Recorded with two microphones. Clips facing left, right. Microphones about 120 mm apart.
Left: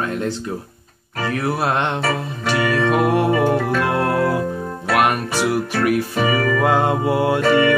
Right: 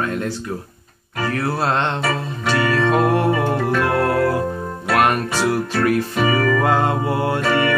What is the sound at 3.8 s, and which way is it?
Organ, 20° left (ahead or behind).